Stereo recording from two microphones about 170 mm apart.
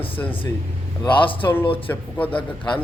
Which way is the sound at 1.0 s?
30° left (ahead or behind).